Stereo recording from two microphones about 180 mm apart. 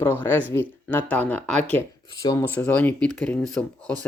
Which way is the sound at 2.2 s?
20° left (ahead or behind).